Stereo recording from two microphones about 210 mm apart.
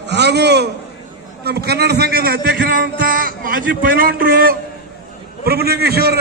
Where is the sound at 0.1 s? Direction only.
55° right (ahead or behind).